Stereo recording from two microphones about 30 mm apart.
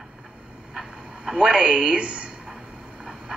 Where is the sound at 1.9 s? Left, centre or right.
Right.